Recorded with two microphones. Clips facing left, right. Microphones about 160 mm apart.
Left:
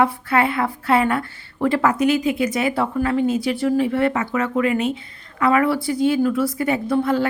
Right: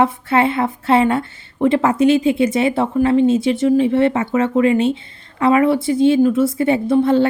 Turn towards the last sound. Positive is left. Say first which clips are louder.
# right 5 dB
turn(degrees=-25)  # may be behind; listen again after turning